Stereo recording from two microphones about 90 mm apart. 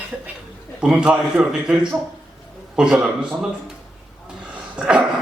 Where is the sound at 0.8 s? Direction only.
10° right (ahead or behind).